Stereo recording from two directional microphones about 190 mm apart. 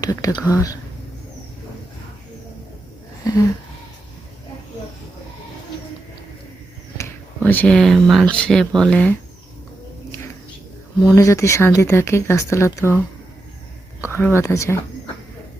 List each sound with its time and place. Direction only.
0.0 s speech: 20° left (ahead or behind)
6.9 s speech: 10° left (ahead or behind)
11.0 s speech: 15° left (ahead or behind)
14.2 s speech: 10° left (ahead or behind)